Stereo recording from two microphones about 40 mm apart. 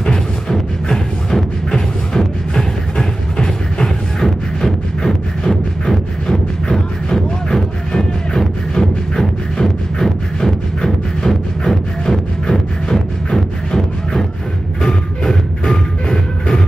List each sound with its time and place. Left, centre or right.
0.0 s music: centre